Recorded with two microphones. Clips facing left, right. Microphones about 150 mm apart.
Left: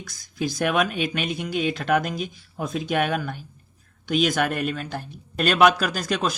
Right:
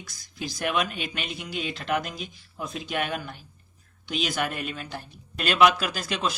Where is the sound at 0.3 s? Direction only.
50° left (ahead or behind).